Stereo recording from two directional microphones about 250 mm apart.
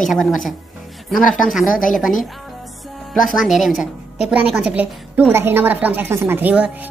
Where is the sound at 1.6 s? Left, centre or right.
Left.